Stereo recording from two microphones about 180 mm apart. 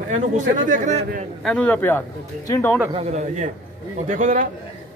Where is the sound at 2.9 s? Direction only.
35° right (ahead or behind).